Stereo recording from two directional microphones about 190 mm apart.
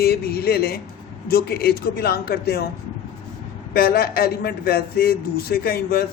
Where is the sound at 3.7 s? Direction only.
55° left (ahead or behind).